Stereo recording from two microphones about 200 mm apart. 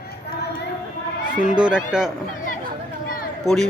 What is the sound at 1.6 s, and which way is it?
Speech, 5° right (ahead or behind).